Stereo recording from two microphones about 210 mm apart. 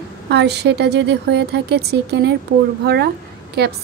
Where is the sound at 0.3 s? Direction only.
55° right (ahead or behind).